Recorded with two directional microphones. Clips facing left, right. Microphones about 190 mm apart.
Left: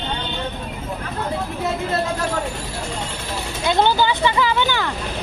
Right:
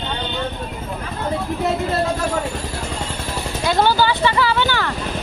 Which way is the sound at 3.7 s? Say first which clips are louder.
Even; 20° left (ahead or behind).